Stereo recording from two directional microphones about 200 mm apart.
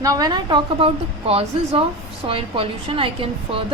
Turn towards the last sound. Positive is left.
turn(degrees=-25)  # may be behind; listen again after turning